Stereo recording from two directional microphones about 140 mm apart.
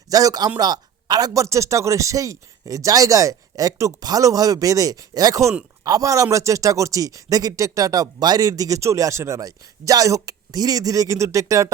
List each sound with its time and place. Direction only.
0.1 s a man's voice: 25° right (ahead or behind)